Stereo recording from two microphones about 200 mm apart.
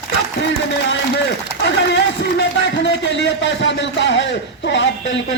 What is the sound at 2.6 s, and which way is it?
A man's voice, 60° left (ahead or behind).